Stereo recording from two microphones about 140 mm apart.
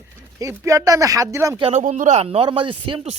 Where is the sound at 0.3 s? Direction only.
20° right (ahead or behind).